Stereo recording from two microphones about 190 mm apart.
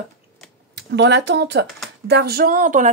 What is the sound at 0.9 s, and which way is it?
Speech, 70° right (ahead or behind).